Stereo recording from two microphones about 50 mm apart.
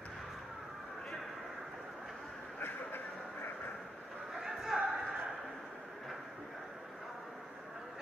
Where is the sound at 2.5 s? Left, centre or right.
Left.